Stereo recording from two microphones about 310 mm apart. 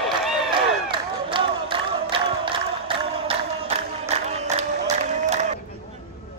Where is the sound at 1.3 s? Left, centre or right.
Centre.